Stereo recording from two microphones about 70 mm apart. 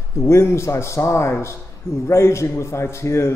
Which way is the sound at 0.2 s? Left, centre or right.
Left.